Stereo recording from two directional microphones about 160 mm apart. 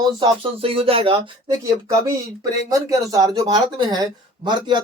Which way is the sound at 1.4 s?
20° right (ahead or behind).